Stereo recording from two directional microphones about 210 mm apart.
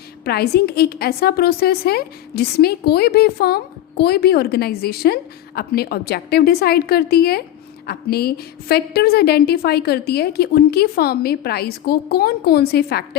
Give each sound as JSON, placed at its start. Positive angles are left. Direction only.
{"t": 0.3, "sound": "a woman's voice", "side_deg": 50}